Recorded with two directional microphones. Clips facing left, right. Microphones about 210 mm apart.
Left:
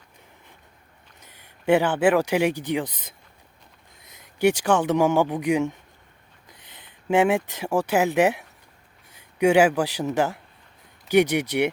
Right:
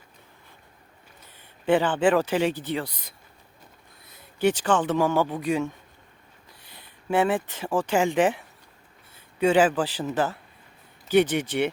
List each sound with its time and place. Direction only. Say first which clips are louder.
1.2 s speech: left 2 dB; 15° left (ahead or behind)